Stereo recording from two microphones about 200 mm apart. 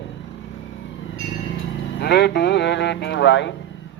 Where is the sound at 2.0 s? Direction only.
55° left (ahead or behind).